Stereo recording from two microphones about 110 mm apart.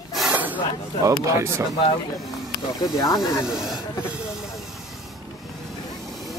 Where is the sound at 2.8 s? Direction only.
35° left (ahead or behind).